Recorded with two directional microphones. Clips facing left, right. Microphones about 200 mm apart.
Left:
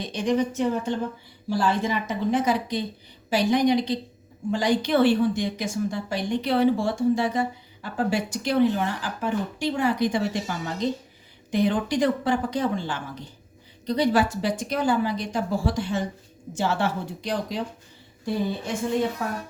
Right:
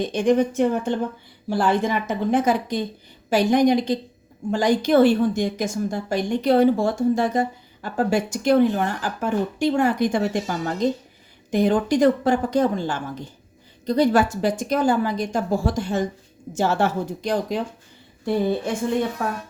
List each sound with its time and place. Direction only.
0.0 s a woman's voice: 50° right (ahead or behind)